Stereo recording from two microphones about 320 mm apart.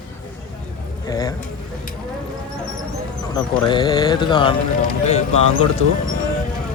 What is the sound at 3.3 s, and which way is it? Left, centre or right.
Speech, centre.